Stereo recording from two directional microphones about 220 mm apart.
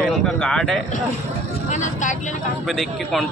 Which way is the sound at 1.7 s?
35° left (ahead or behind).